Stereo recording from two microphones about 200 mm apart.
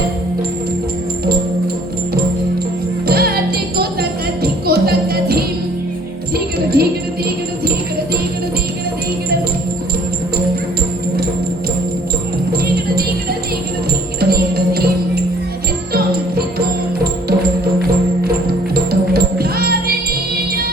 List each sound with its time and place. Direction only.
3.1 s music: 50° right (ahead or behind)
6.8 s music: 50° right (ahead or behind)
14.2 s music: 50° right (ahead or behind)
16.6 s music: 50° right (ahead or behind)
18.7 s music: 50° right (ahead or behind)